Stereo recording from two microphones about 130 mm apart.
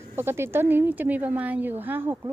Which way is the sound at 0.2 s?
20° right (ahead or behind).